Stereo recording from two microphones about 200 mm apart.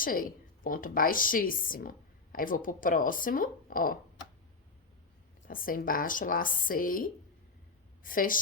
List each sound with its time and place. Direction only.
0.0 s a woman's voice: 45° left (ahead or behind)
5.5 s a woman's voice: 45° left (ahead or behind)